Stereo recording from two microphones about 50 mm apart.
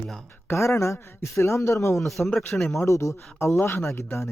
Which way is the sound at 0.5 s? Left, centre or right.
Left.